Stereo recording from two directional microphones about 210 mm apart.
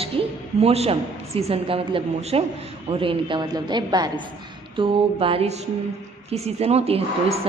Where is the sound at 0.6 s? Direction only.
30° right (ahead or behind).